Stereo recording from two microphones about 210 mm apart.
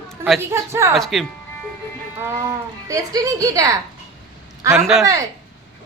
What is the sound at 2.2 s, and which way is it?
Speech, 15° right (ahead or behind).